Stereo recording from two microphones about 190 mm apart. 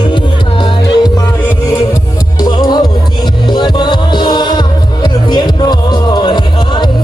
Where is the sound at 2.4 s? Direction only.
20° left (ahead or behind).